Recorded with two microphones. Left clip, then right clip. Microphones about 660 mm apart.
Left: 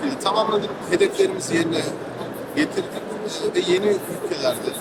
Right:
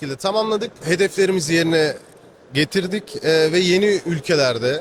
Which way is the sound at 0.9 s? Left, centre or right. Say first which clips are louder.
Right 2 dB; right.